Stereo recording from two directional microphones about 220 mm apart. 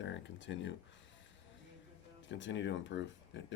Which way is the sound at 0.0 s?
55° left (ahead or behind).